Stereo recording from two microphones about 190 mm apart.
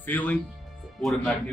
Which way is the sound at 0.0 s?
10° left (ahead or behind).